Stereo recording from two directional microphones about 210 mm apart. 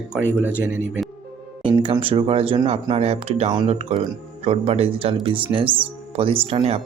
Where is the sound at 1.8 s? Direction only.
25° right (ahead or behind).